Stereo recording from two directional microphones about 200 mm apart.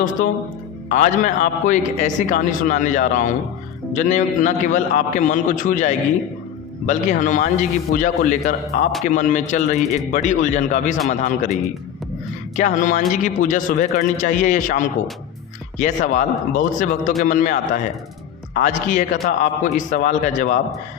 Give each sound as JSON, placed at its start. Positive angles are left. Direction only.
{"t": 0.9, "sound": "a man's voice", "side_deg": 40}
{"t": 12.5, "sound": "a man's voice", "side_deg": 40}
{"t": 16.1, "sound": "a man's voice", "side_deg": 40}
{"t": 18.6, "sound": "a man's voice", "side_deg": 40}